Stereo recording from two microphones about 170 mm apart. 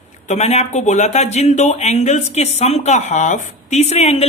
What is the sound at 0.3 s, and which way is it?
A woman's voice, 40° left (ahead or behind).